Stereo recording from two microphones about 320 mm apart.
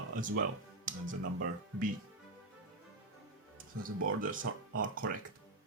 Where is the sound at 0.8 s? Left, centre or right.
Right.